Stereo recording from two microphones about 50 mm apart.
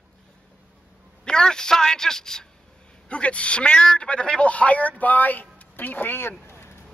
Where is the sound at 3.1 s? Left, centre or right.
Left.